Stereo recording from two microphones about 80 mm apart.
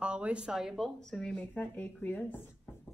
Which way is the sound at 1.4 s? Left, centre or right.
Left.